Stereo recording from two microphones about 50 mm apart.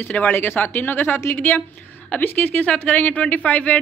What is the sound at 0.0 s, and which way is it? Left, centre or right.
A man's voice, left.